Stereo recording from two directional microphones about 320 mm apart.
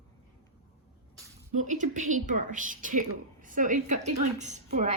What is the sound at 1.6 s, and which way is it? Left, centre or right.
A woman's voice, right.